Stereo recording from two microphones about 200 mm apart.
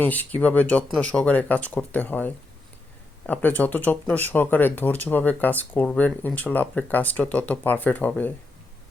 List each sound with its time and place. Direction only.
0.0 s speech: 10° left (ahead or behind)